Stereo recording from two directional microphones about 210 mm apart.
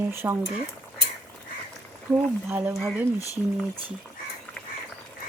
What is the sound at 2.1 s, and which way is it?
Speech, 10° right (ahead or behind).